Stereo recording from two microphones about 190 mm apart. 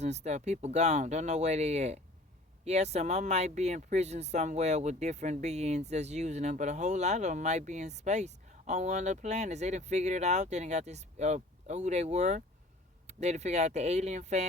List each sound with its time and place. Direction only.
0.0 s speech: 35° right (ahead or behind)